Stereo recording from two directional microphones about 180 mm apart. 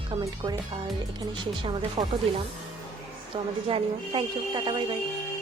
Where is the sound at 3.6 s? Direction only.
30° right (ahead or behind).